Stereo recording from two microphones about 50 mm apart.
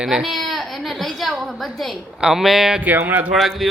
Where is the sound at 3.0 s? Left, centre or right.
Right.